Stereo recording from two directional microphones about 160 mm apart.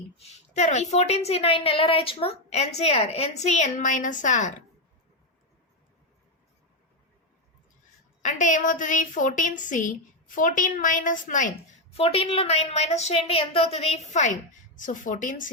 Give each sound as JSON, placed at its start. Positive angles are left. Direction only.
{"t": 0.2, "sound": "a woman's voice", "side_deg": 45}
{"t": 8.2, "sound": "a woman's voice", "side_deg": 50}
{"t": 11.9, "sound": "a woman's voice", "side_deg": 35}